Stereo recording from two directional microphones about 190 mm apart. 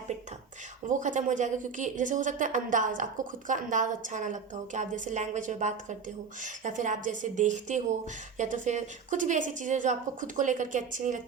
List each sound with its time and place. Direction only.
0.9 s a woman's voice: 40° right (ahead or behind)